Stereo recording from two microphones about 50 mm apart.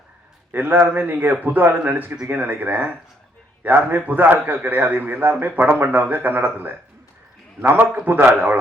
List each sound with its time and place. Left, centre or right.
0.5 s a man's voice: right
7.9 s a man's voice: right